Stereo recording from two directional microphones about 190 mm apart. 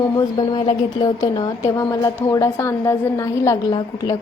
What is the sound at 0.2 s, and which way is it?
A woman's voice, 25° left (ahead or behind).